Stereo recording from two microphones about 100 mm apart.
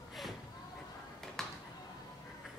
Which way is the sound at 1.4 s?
5° left (ahead or behind).